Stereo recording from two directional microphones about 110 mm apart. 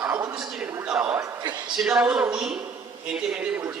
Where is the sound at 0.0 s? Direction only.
20° right (ahead or behind).